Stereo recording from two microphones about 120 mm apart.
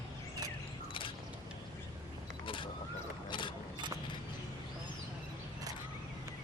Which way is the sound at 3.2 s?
40° left (ahead or behind).